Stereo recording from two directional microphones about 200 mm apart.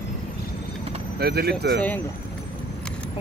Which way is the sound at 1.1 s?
55° right (ahead or behind).